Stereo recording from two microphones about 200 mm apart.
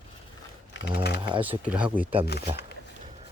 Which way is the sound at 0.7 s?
55° left (ahead or behind).